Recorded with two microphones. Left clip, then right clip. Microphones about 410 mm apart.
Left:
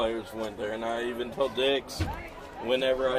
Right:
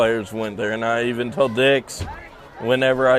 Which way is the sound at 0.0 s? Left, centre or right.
Right.